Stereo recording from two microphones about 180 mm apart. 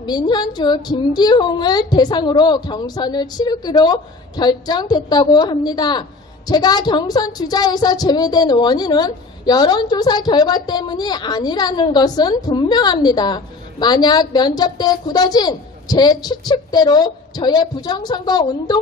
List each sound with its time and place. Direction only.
0.0 s a woman's voice: 25° left (ahead or behind)